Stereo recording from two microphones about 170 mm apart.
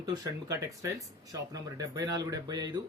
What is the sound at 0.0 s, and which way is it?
Speech, 20° right (ahead or behind).